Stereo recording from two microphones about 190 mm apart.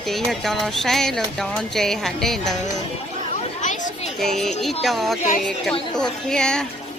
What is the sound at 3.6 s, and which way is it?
Chatter, 40° left (ahead or behind).